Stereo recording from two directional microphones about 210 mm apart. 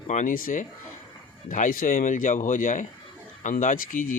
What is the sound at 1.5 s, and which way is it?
A man's voice, 40° left (ahead or behind).